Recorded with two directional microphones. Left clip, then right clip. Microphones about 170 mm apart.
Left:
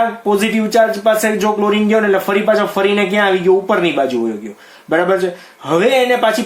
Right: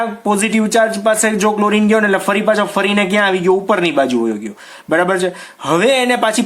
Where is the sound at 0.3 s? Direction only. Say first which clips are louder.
Even; 40° right (ahead or behind).